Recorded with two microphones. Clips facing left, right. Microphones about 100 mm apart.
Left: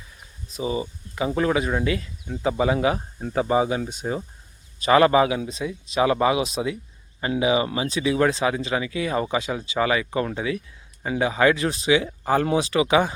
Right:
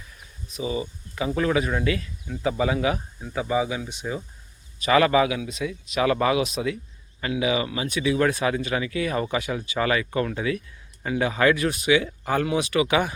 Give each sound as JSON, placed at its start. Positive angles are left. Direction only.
{"t": 0.4, "sound": "speech", "side_deg": 35}
{"t": 3.3, "sound": "speech", "side_deg": 40}
{"t": 4.8, "sound": "speech", "side_deg": 30}